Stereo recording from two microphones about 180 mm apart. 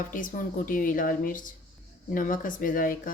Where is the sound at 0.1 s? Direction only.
50° left (ahead or behind).